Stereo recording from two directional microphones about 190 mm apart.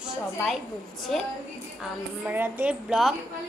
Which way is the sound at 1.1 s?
Centre (ahead or behind).